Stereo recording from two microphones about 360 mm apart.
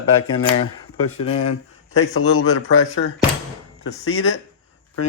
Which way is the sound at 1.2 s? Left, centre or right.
Centre.